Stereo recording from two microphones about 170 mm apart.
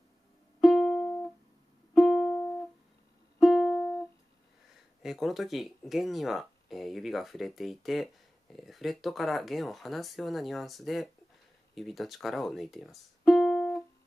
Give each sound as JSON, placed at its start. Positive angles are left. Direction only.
{"t": 0.6, "sound": "music", "side_deg": 0}
{"t": 5.0, "sound": "speech", "side_deg": 0}